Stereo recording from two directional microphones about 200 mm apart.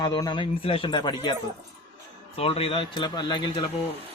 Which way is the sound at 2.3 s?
30° left (ahead or behind).